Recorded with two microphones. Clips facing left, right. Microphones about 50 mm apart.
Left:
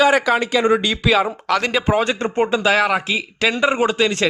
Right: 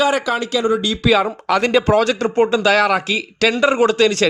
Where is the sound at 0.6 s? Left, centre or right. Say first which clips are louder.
Left 1 dB; left.